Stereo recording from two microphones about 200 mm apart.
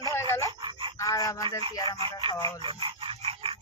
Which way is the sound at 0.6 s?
25° right (ahead or behind).